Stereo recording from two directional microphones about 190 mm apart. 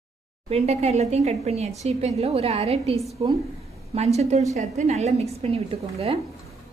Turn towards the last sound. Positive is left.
turn(degrees=-30)  # may be behind; listen again after turning